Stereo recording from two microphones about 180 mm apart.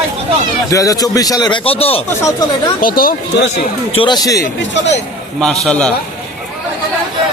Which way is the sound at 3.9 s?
30° left (ahead or behind).